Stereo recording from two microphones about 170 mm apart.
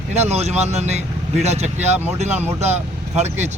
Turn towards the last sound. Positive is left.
turn(degrees=-40)  # may be behind; listen again after turning